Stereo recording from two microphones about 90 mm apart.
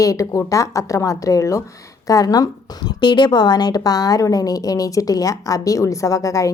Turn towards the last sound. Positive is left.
turn(degrees=40)  # may be behind; listen again after turning